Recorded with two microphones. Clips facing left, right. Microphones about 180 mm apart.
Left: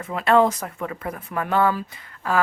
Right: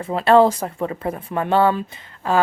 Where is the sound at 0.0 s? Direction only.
30° right (ahead or behind).